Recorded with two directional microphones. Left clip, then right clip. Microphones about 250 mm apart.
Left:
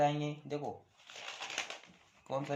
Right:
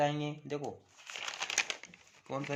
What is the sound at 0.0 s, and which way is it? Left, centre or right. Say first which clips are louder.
Speech: even; right.